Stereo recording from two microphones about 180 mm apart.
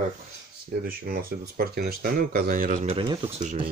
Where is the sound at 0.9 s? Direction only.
55° right (ahead or behind).